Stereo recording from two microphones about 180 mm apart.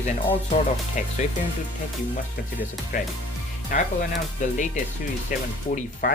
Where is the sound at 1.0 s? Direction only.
45° left (ahead or behind).